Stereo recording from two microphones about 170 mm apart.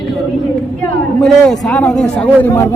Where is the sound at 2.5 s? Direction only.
15° left (ahead or behind).